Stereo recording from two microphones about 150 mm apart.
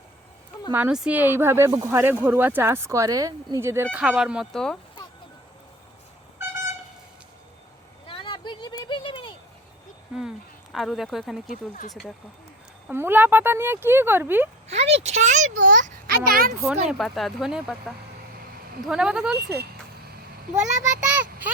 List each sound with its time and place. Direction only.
0.7 s speech: 10° right (ahead or behind)
3.9 s speech: 5° right (ahead or behind)
8.0 s a sound: 35° left (ahead or behind)
10.2 s a sound: centre (ahead or behind)
12.9 s speech: 15° right (ahead or behind)
14.7 s a child's voice: 45° right (ahead or behind); by 16.6 s 75° right (ahead or behind)
16.6 s speech: centre (ahead or behind)
20.6 s a child's voice: 55° right (ahead or behind)